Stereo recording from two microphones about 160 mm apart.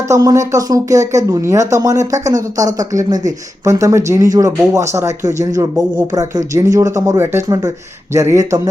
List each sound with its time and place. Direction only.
0.1 s speech: 20° right (ahead or behind)